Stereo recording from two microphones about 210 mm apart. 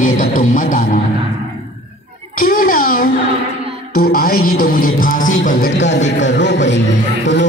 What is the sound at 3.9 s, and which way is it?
Music, 45° left (ahead or behind).